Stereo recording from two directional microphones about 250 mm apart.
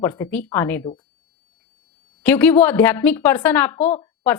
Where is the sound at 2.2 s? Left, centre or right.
Centre.